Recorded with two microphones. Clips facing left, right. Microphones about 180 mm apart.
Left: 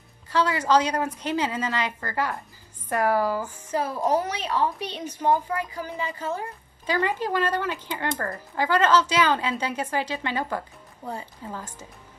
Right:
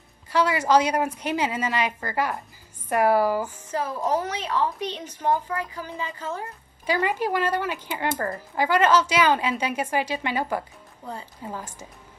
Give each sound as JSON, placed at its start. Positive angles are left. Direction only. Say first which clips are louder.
{"t": 0.3, "sound": "speech", "louder": "right 1 dB", "side_deg": -10}
{"t": 3.5, "sound": "a woman's voice", "louder": "left 1 dB", "side_deg": 10}
{"t": 6.9, "sound": "speech", "louder": "right 1 dB", "side_deg": -15}